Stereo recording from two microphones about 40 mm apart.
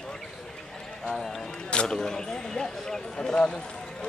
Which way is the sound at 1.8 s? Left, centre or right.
Centre.